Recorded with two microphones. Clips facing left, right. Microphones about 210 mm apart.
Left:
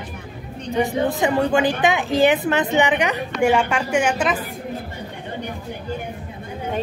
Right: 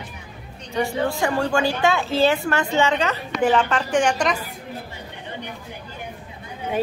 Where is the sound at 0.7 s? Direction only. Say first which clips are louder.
Left 2 dB; 20° left (ahead or behind).